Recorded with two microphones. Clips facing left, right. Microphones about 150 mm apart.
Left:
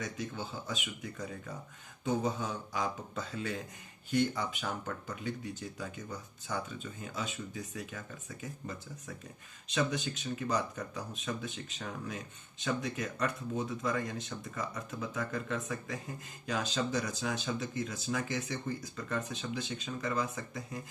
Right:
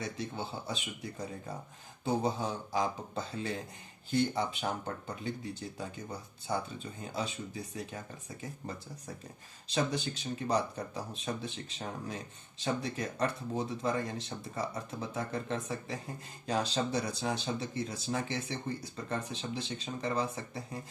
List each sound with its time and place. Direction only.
0.0 s speech: 30° right (ahead or behind)